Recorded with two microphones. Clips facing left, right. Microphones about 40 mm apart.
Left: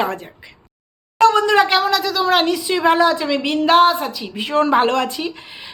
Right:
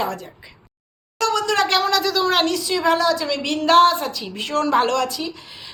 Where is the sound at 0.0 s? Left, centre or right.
Left; by 2.6 s centre.